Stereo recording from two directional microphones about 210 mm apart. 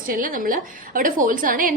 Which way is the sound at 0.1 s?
40° right (ahead or behind).